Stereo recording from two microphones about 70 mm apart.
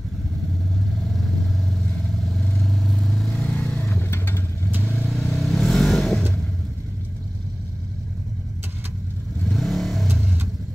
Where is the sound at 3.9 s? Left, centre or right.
Left.